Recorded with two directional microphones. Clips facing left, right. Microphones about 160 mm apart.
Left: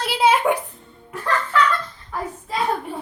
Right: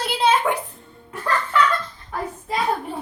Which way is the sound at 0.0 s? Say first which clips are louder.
Left 2 dB; 5° left (ahead or behind).